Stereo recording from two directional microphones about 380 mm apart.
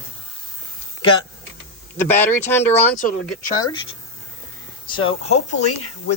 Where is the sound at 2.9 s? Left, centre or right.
Left.